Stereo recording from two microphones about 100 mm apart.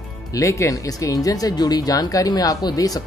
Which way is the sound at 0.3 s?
30° left (ahead or behind).